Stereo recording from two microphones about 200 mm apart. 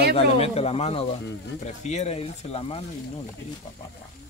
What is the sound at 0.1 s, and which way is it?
Speech, 30° left (ahead or behind).